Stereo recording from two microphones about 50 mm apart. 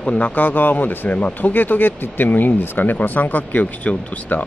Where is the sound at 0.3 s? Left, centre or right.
Left.